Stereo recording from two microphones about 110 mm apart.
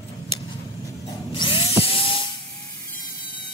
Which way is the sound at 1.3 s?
50° left (ahead or behind).